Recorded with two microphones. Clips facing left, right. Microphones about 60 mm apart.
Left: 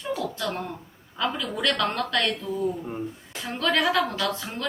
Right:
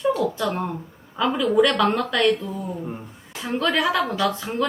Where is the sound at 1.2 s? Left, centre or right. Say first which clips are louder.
Right 8 dB; centre.